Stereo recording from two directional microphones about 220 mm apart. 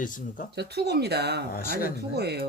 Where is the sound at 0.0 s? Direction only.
35° left (ahead or behind).